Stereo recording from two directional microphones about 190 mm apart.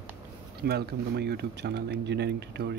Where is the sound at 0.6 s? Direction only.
60° right (ahead or behind).